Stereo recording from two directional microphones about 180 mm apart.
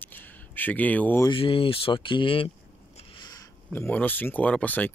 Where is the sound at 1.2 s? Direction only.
30° left (ahead or behind).